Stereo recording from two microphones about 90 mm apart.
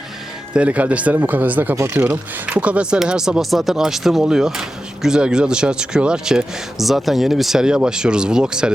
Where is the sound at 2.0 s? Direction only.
15° right (ahead or behind).